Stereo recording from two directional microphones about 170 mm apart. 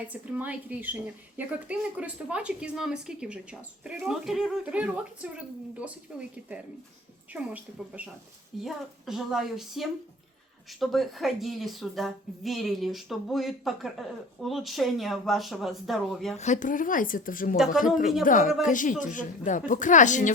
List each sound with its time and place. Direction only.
0.0 s a woman's voice: 10° right (ahead or behind)
16.4 s a woman's voice: 45° left (ahead or behind)